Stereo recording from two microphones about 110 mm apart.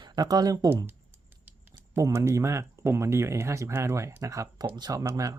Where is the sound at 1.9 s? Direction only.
25° right (ahead or behind).